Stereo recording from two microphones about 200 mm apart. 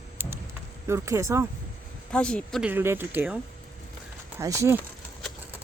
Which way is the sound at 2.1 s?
5° left (ahead or behind).